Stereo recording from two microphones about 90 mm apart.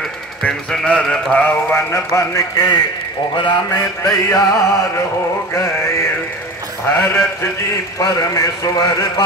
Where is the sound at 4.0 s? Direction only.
35° left (ahead or behind).